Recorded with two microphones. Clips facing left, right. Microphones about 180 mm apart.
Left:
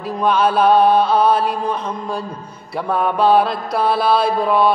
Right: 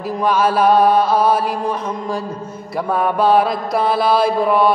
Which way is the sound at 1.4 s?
10° right (ahead or behind).